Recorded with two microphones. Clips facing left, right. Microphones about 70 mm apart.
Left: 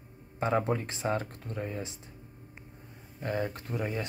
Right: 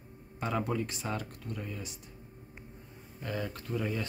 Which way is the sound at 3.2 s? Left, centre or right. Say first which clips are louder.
Left 4 dB; left.